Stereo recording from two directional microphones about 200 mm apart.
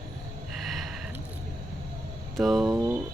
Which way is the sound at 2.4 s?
Centre (ahead or behind).